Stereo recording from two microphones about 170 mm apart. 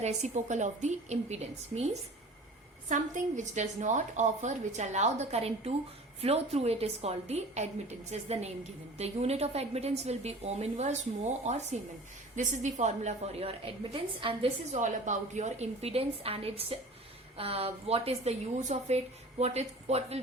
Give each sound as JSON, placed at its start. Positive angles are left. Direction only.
{"t": 0.0, "sound": "a woman's voice", "side_deg": -45}